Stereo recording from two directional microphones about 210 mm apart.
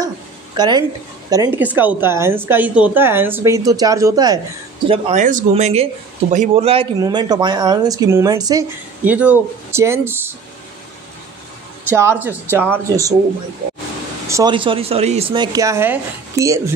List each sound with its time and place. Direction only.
0.6 s speech: 20° right (ahead or behind)
11.9 s speech: 10° right (ahead or behind)
14.2 s speech: 15° right (ahead or behind)